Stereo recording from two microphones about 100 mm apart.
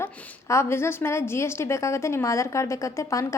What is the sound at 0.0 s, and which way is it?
A woman's voice, 30° left (ahead or behind).